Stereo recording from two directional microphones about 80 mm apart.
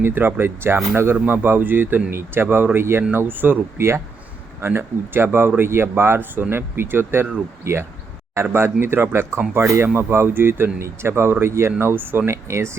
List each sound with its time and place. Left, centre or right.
0.0 s speech: right